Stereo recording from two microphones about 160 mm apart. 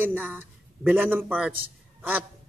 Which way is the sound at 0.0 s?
10° right (ahead or behind).